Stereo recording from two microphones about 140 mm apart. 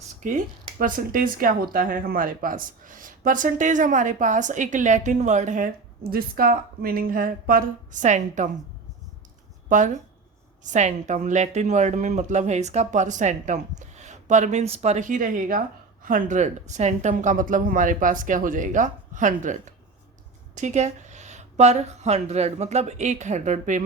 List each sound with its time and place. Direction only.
0.2 s speech: 70° right (ahead or behind)
9.6 s a woman's voice: 60° right (ahead or behind); by 15.6 s 80° right
16.0 s speech: 70° right (ahead or behind)
20.6 s a woman's voice: 55° right (ahead or behind)